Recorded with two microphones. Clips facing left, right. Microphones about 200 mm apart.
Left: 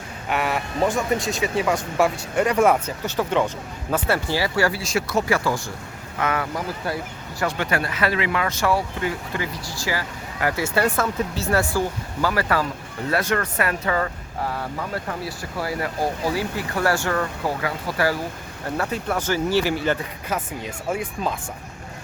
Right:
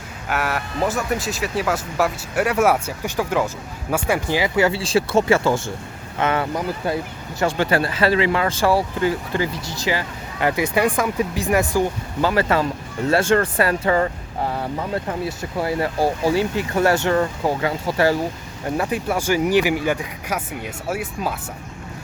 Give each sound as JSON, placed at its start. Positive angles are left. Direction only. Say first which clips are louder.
{"t": 0.3, "sound": "speech", "louder": "even", "side_deg": 0}
{"t": 9.7, "sound": "speech", "louder": "right 2 dB", "side_deg": -20}
{"t": 18.8, "sound": "speech", "louder": "right 2 dB", "side_deg": -15}